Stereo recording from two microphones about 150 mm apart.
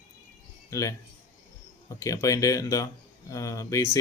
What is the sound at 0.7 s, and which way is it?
Speech, 20° left (ahead or behind).